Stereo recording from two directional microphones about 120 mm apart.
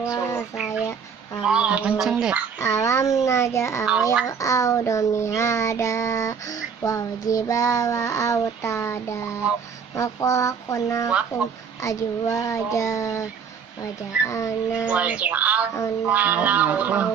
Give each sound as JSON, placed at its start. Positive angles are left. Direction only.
{"t": 0.0, "sound": "a sound", "side_deg": 25}
{"t": 1.4, "sound": "music", "side_deg": -10}
{"t": 2.6, "sound": "child singing", "side_deg": 25}
{"t": 14.9, "sound": "music", "side_deg": -10}